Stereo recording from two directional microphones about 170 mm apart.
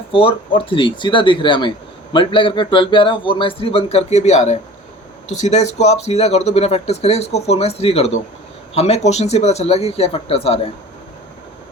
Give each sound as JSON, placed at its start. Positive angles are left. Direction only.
{"t": 0.1, "sound": "speech", "side_deg": 30}